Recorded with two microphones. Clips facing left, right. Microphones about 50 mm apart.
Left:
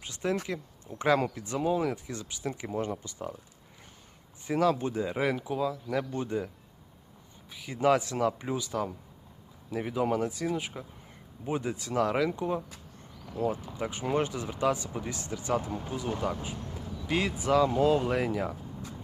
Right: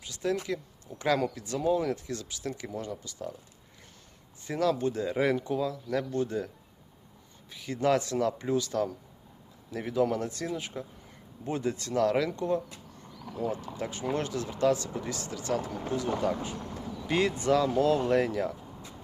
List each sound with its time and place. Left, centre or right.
0.0 s speech: left
1.8 s speech: centre; by 3.2 s left
4.4 s speech: centre
5.2 s speech: centre
6.1 s speech: left
7.5 s speech: centre
13.2 s speech: centre
13.7 s speech: centre
15.9 s speech: centre